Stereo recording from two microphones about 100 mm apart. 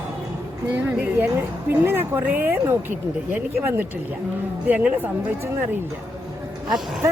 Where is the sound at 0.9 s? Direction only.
20° right (ahead or behind).